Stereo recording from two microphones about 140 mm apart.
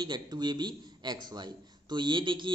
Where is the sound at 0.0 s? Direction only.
30° right (ahead or behind).